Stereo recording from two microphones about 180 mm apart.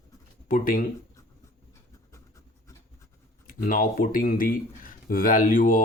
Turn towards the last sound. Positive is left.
turn(degrees=50)  # may be behind; listen again after turning